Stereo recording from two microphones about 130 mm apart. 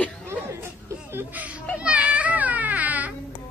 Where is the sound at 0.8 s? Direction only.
15° right (ahead or behind).